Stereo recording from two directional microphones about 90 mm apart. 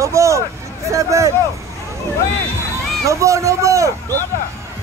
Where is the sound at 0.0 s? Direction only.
35° right (ahead or behind).